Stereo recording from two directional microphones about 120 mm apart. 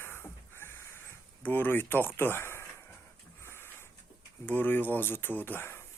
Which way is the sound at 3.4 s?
20° left (ahead or behind).